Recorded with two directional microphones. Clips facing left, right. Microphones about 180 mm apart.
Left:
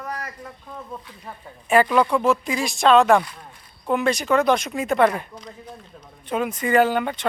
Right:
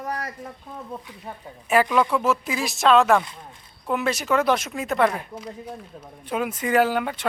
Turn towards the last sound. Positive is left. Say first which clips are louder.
# left 2 dB
turn(degrees=-5)  # may be behind; listen again after turning